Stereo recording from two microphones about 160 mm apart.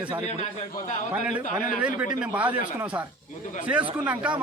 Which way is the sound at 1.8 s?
10° right (ahead or behind).